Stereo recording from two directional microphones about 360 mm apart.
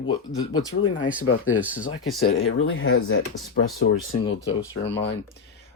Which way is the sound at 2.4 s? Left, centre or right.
Left.